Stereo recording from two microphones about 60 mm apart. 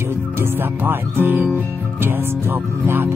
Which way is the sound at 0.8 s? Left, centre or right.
Right.